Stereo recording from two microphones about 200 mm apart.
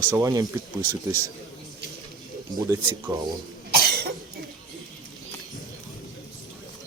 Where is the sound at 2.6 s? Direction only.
15° right (ahead or behind).